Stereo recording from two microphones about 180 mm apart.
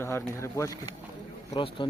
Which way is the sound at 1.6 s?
30° left (ahead or behind).